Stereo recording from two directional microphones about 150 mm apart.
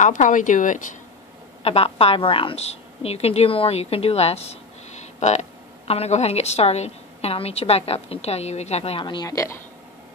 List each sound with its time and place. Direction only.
0.0 s speech: 60° left (ahead or behind)
1.6 s a woman's voice: 40° left (ahead or behind); by 9.6 s 20° left (ahead or behind)